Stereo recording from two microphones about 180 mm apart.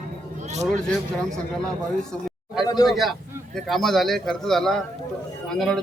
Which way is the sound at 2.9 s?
Centre (ahead or behind).